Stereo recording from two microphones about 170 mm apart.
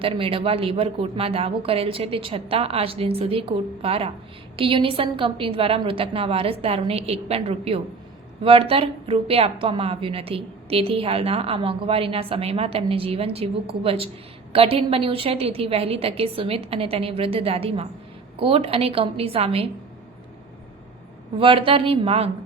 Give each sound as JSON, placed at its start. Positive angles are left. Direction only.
{"t": 0.0, "sound": "a woman's voice", "side_deg": -35}
{"t": 21.3, "sound": "a woman's voice", "side_deg": -30}